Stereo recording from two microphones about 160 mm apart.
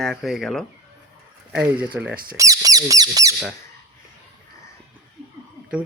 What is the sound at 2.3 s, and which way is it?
Squawk, 20° right (ahead or behind).